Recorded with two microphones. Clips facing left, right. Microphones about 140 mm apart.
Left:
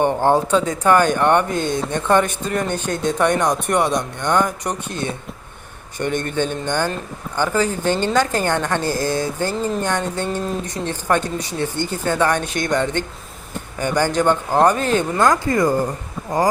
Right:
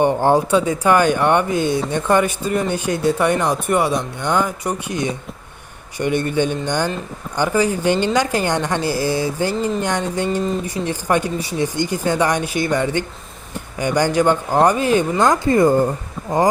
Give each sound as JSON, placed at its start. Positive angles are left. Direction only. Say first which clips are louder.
{"t": 0.0, "sound": "speech", "louder": "right 1 dB", "side_deg": -15}